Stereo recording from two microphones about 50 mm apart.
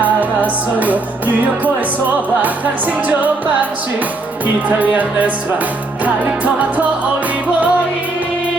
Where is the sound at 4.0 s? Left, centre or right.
Right.